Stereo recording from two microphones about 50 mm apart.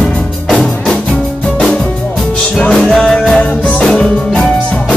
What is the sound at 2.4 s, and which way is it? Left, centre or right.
Music, left.